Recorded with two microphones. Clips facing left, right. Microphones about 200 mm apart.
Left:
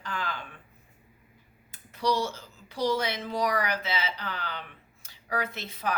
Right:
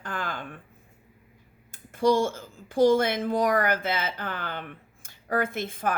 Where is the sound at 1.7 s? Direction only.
50° right (ahead or behind).